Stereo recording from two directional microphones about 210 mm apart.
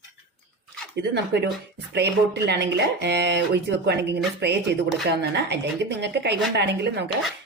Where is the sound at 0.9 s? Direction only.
55° right (ahead or behind).